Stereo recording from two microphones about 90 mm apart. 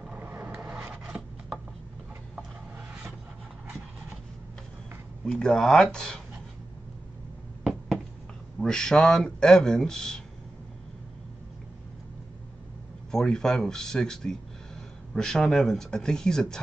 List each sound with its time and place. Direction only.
0.2 s a sound: 20° right (ahead or behind)
5.2 s speech: 10° left (ahead or behind)
8.5 s speech: 5° left (ahead or behind)
13.1 s speech: 5° left (ahead or behind)